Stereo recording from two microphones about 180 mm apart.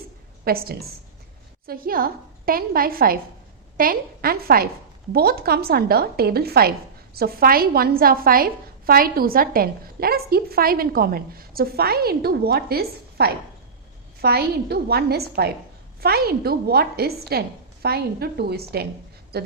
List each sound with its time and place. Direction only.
0.4 s a woman's voice: 55° right (ahead or behind)